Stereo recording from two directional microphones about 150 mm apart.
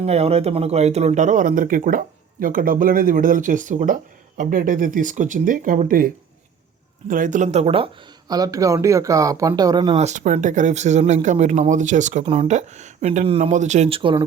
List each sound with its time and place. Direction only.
0.0 s speech: 45° right (ahead or behind); by 6.1 s 65° right (ahead or behind)
7.1 s speech: 60° right (ahead or behind); by 7.9 s 40° right (ahead or behind)
8.3 s speech: 25° right (ahead or behind)
10.0 s speech: 55° right (ahead or behind)
12.2 s speech: 40° right (ahead or behind)